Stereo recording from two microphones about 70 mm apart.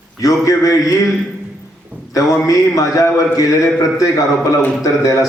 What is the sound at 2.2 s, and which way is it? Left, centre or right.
A man's voice, left.